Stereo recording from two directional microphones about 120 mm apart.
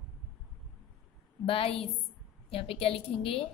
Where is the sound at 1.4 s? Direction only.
50° left (ahead or behind).